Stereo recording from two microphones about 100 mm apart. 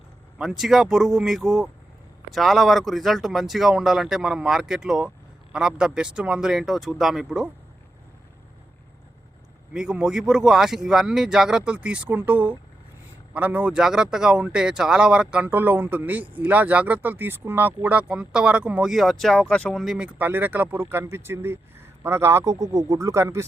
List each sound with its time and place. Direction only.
0.3 s speech: 5° right (ahead or behind)
9.7 s speech: 10° right (ahead or behind); by 19.8 s 10° left (ahead or behind)
19.8 s speech: centre (ahead or behind)
20.1 s speech: 15° right (ahead or behind)